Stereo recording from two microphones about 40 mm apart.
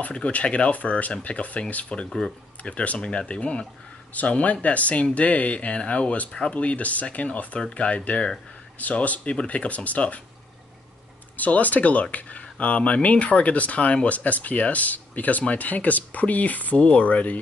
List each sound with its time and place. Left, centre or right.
0.1 s speech: left
2.0 s speech: centre
2.6 s speech: left
11.3 s speech: left